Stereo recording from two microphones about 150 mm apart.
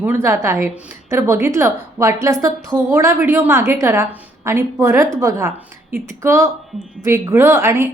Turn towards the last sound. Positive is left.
turn(degrees=-20)  # may be behind; listen again after turning